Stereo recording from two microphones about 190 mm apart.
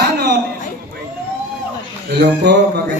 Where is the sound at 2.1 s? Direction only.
60° right (ahead or behind).